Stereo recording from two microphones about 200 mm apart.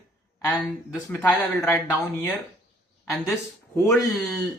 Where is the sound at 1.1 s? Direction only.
5° left (ahead or behind).